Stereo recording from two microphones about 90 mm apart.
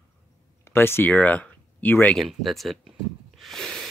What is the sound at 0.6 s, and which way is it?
Speech, 25° left (ahead or behind).